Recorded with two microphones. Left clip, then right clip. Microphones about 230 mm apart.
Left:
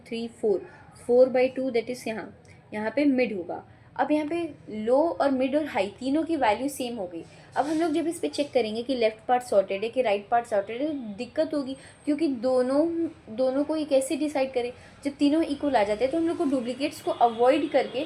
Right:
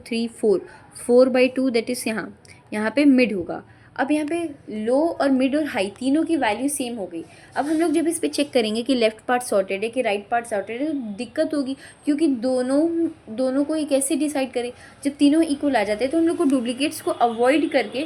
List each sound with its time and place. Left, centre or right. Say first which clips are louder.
0.1 s a woman's voice: right 6 dB; right